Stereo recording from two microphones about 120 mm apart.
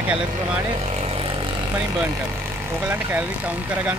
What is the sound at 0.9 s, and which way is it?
Vehicle, 50° right (ahead or behind).